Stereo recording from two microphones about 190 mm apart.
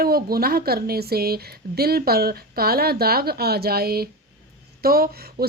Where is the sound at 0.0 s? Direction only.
50° right (ahead or behind).